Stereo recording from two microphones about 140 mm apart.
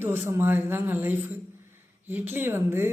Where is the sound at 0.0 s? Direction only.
15° right (ahead or behind).